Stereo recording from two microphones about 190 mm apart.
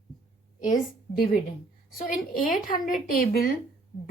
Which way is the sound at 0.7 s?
50° left (ahead or behind).